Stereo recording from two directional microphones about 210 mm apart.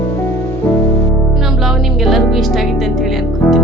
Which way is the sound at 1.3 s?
Centre (ahead or behind).